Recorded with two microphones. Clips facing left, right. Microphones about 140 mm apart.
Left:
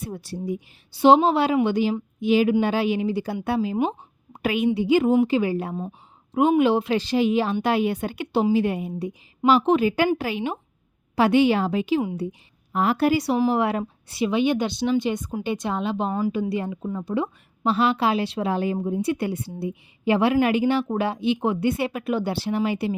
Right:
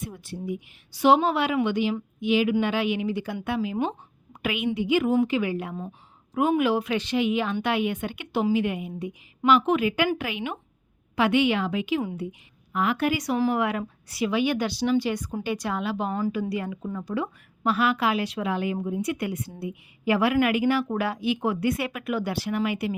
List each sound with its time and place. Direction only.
0.0 s a woman's voice: 35° left (ahead or behind)
6.3 s a woman's voice: 25° left (ahead or behind)